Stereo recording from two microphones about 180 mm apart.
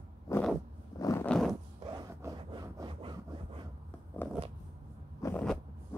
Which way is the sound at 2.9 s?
30° right (ahead or behind).